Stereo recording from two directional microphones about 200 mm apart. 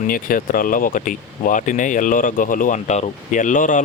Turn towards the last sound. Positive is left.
turn(degrees=40)  # may be behind; listen again after turning